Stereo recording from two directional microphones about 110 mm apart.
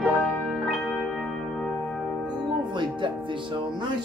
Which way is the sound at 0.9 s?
Centre (ahead or behind).